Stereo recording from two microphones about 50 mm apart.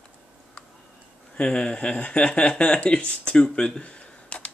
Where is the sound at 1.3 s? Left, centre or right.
Left.